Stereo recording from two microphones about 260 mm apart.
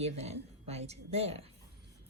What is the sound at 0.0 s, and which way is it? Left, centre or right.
Speech, right.